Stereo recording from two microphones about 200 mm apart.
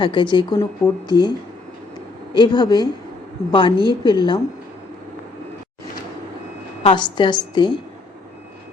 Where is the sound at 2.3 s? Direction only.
20° left (ahead or behind).